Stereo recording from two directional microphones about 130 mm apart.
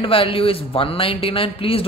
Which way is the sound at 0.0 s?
45° left (ahead or behind).